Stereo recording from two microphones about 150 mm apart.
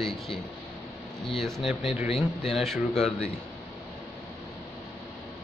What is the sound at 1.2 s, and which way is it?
Speech, centre (ahead or behind).